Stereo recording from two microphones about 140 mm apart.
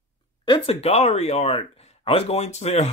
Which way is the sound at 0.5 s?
45° left (ahead or behind).